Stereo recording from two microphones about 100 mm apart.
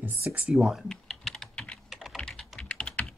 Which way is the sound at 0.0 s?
15° right (ahead or behind).